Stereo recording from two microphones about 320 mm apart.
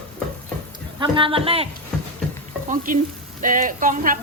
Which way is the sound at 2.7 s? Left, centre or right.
Right.